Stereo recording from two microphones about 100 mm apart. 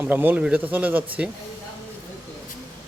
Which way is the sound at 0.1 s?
20° right (ahead or behind).